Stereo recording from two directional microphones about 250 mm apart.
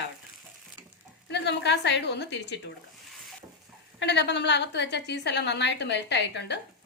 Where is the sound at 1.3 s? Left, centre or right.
Left.